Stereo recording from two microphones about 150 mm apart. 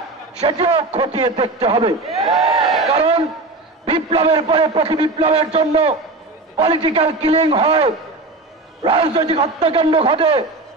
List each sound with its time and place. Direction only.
0.4 s a man's voice: 40° right (ahead or behind)
1.0 s speech: 25° right (ahead or behind)
1.3 s a man's voice: 40° right (ahead or behind)
2.4 s a sound: 40° right (ahead or behind)
3.8 s a man's voice: 40° right (ahead or behind)